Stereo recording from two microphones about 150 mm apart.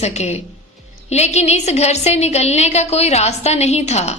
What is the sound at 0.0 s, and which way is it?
A woman's voice, 45° left (ahead or behind).